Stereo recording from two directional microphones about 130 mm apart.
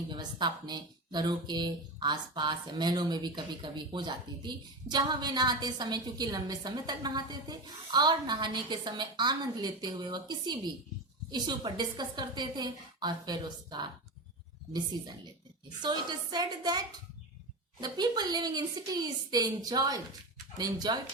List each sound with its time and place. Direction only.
0.2 s a woman's voice: 35° right (ahead or behind)
15.8 s a woman's voice: 35° right (ahead or behind)